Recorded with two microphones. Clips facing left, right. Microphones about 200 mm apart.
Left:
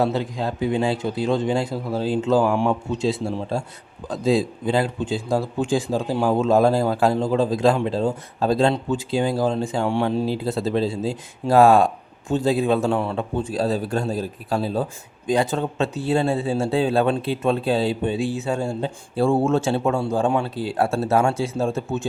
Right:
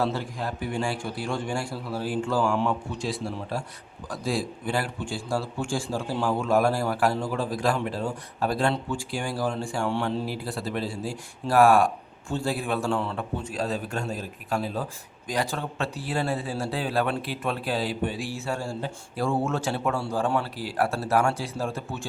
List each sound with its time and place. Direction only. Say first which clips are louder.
0.0 s a man's voice: left 6 dB; 20° left (ahead or behind)
13.4 s a man's voice: left 8 dB; 35° left (ahead or behind)